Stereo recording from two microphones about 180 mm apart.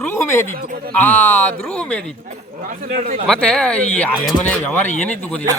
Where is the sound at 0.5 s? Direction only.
55° right (ahead or behind).